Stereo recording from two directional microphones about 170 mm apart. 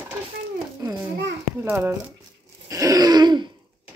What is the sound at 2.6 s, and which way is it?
Throat clearing, 20° right (ahead or behind).